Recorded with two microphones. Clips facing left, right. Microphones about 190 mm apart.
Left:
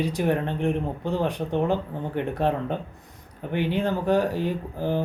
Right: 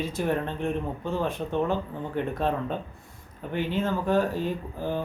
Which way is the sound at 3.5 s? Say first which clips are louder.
Left 3 dB; 15° left (ahead or behind).